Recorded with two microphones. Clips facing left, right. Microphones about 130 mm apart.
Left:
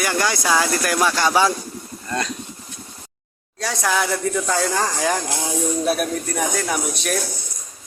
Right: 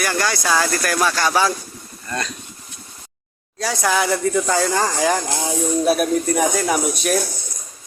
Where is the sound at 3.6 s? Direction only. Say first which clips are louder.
Right 2 dB; centre (ahead or behind).